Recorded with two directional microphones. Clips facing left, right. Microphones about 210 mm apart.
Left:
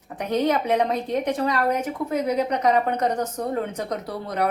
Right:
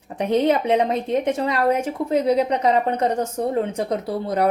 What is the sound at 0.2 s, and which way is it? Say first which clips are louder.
A woman's voice: right 4 dB; 25° right (ahead or behind).